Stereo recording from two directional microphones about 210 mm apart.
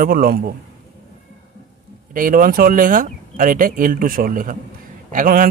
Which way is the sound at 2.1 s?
40° right (ahead or behind).